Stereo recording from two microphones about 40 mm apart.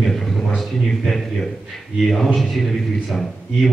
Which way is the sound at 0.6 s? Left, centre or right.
Centre.